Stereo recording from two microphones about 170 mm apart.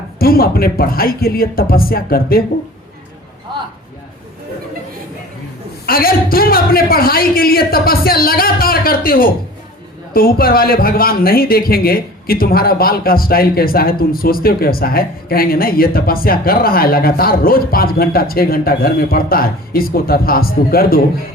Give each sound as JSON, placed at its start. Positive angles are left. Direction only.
{"t": 0.2, "sound": "speech", "side_deg": 60}
{"t": 5.8, "sound": "speech", "side_deg": 60}